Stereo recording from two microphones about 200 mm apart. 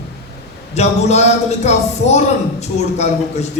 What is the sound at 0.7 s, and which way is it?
Speech, 35° left (ahead or behind).